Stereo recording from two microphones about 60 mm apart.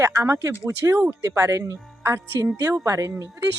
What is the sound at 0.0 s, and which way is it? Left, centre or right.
Speech, right.